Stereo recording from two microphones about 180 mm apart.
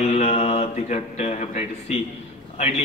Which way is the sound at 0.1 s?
35° left (ahead or behind).